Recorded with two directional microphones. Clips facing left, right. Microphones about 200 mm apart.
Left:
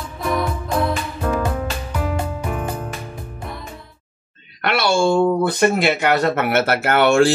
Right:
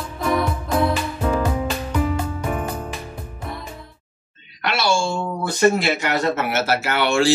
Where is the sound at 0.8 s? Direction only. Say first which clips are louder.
Right 1 dB; 5° right (ahead or behind).